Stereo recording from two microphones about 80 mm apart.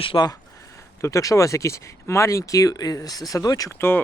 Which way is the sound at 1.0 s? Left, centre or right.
Left.